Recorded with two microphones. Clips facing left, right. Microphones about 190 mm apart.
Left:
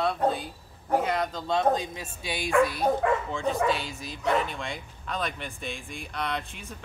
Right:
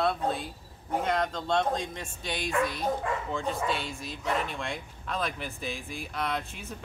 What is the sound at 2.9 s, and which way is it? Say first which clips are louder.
Speech: left 5 dB; 55° left (ahead or behind).